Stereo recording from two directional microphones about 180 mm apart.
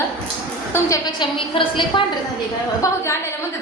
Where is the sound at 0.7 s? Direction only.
20° left (ahead or behind).